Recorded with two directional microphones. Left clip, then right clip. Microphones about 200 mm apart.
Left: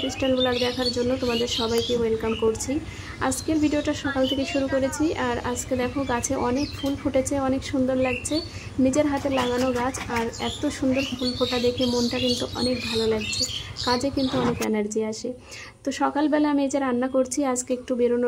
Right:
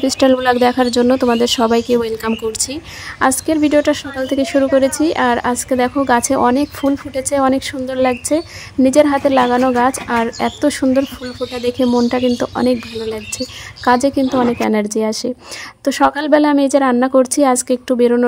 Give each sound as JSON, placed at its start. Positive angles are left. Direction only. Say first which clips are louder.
{"t": 0.0, "sound": "speech", "louder": "right 10 dB", "side_deg": -50}